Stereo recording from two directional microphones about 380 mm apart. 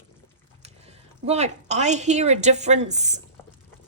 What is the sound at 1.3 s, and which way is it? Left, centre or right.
A woman's voice, centre.